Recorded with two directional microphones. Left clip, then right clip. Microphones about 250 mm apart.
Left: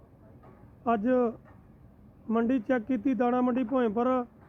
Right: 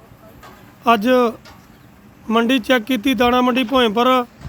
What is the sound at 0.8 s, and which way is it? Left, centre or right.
Speech, centre.